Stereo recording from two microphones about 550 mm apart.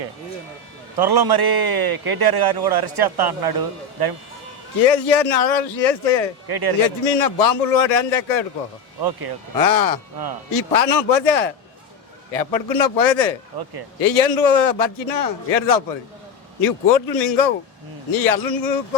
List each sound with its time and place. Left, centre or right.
0.9 s a man's voice: right
4.8 s a man's voice: left
6.5 s a man's voice: right
6.7 s a man's voice: left
9.6 s a man's voice: left